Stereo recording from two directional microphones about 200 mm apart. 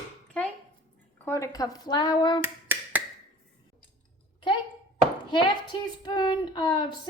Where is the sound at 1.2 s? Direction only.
15° left (ahead or behind).